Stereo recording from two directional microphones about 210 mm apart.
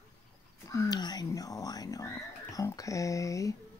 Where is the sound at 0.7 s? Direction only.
20° left (ahead or behind).